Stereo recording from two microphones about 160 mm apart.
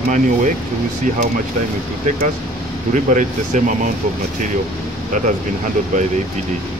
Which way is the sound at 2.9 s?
50° right (ahead or behind).